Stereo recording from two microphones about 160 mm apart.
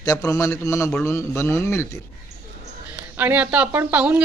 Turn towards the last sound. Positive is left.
turn(degrees=-10)  # may be behind; listen again after turning